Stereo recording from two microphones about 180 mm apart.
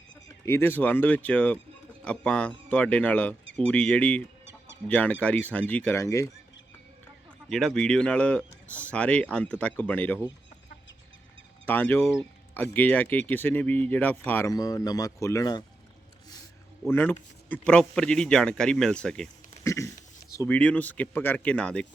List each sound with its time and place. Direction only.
0.3 s speech: 15° left (ahead or behind)
7.5 s speech: 5° left (ahead or behind)
11.6 s speech: 10° left (ahead or behind)
14.5 s speech: 20° left (ahead or behind)
16.9 s a man's voice: 10° left (ahead or behind)
19.6 s speech: 15° left (ahead or behind)